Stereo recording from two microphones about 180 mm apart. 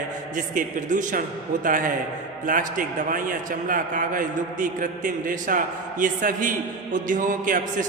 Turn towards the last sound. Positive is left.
turn(degrees=-45)  # may be behind; listen again after turning